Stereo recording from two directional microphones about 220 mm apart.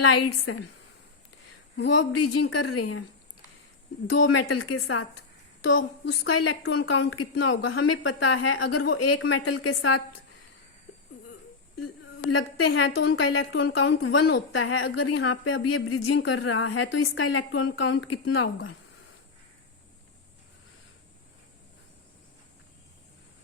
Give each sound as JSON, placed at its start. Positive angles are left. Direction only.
{"t": 0.1, "sound": "a woman's voice", "side_deg": 70}
{"t": 1.9, "sound": "speech", "side_deg": 80}
{"t": 4.1, "sound": "speech", "side_deg": 75}
{"t": 4.5, "sound": "a woman's voice", "side_deg": 65}
{"t": 6.3, "sound": "a woman's voice", "side_deg": 80}
{"t": 12.4, "sound": "a woman's voice", "side_deg": 60}
{"t": 13.2, "sound": "a woman's voice", "side_deg": 70}
{"t": 13.5, "sound": "a woman's voice", "side_deg": 55}
{"t": 15.3, "sound": "speech", "side_deg": 65}